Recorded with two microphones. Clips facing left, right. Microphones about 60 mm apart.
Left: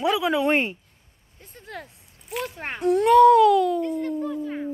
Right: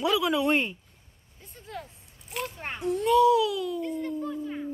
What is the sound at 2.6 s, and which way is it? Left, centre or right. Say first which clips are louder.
A child's voice: left 9 dB; left.